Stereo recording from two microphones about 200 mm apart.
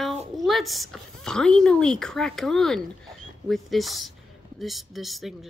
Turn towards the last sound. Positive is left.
turn(degrees=0)  # may be behind; listen again after turning